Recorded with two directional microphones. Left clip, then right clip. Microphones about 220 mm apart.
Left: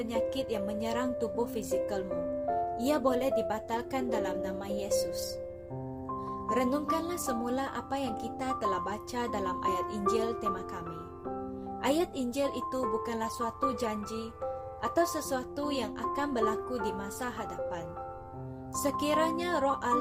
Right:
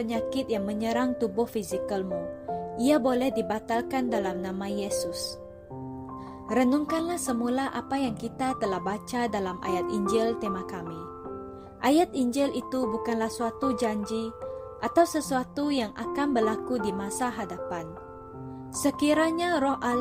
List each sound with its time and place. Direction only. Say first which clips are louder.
0.0 s a woman's voice: right 2 dB; 35° right (ahead or behind)
6.5 s a woman's voice: right 4 dB; 30° right (ahead or behind)
11.8 s a woman's voice: right 7 dB; 35° right (ahead or behind)